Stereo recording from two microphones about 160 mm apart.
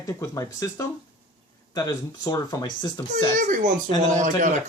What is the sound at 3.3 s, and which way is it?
Speech, 50° right (ahead or behind).